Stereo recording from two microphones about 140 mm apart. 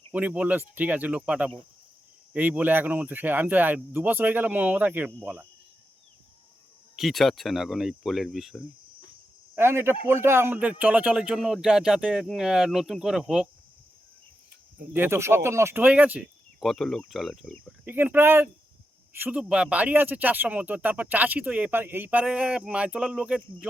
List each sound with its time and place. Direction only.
0.1 s a man's voice: 10° right (ahead or behind)
6.9 s a man's voice: centre (ahead or behind)
9.6 s a man's voice: 15° right (ahead or behind)
14.9 s a man's voice: 15° right (ahead or behind)
16.6 s a man's voice: 5° left (ahead or behind)
17.8 s a man's voice: 15° right (ahead or behind)